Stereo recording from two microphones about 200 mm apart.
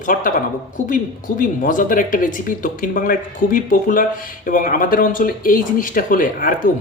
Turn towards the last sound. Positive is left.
turn(degrees=40)  # may be behind; listen again after turning